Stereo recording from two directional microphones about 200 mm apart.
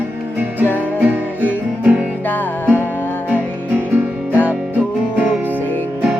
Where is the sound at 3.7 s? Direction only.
10° right (ahead or behind).